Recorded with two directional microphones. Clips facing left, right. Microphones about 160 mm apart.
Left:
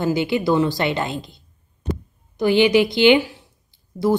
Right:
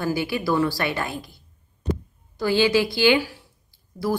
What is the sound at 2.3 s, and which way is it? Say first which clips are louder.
Speech: left 4 dB; 20° left (ahead or behind).